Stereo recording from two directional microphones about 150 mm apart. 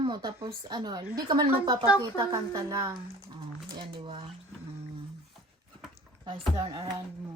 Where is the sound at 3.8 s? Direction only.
35° right (ahead or behind).